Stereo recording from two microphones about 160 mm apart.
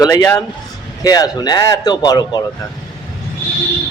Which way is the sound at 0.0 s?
20° left (ahead or behind).